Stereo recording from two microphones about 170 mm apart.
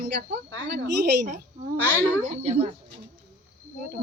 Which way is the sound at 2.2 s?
40° right (ahead or behind).